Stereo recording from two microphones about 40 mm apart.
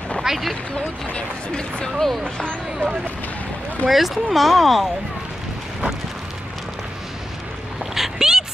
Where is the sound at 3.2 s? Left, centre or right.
Left.